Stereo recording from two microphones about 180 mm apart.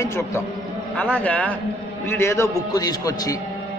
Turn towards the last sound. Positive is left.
turn(degrees=20)  # may be behind; listen again after turning